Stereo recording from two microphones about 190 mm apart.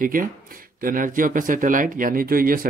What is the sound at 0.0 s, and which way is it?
Speech, 45° right (ahead or behind).